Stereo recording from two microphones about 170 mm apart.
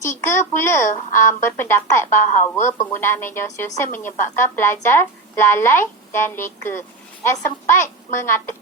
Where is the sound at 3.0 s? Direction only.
15° left (ahead or behind).